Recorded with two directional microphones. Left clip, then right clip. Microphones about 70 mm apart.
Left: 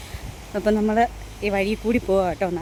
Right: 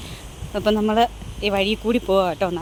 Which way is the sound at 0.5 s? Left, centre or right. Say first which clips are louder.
Right 1 dB; left.